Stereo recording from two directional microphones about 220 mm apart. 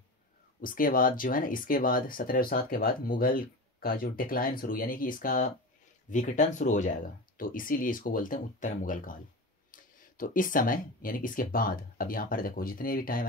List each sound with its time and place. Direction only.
0.6 s speech: 40° left (ahead or behind)